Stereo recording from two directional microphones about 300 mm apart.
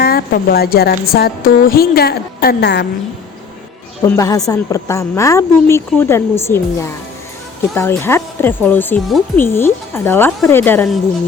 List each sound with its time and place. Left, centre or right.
0.0 s a woman's voice: left
4.0 s speech: centre